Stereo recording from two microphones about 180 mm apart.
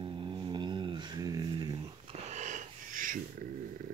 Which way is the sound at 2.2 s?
40° right (ahead or behind).